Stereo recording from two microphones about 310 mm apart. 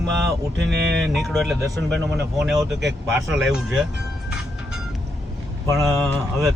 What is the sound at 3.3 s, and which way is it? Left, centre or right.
Speech, centre.